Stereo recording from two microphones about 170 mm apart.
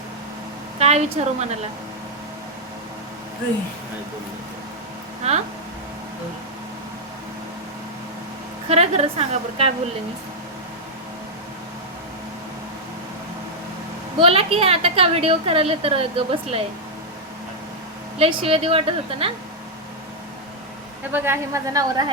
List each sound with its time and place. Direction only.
0.8 s a woman's voice: 40° right (ahead or behind)
5.2 s a woman's voice: 40° right (ahead or behind)
8.7 s a woman's voice: 35° right (ahead or behind)
14.2 s a woman's voice: 35° right (ahead or behind)
18.2 s a woman's voice: 30° right (ahead or behind)
21.1 s a woman's voice: 15° right (ahead or behind)